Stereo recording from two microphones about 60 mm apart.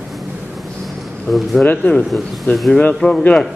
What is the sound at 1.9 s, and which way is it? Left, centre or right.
A man's voice, left.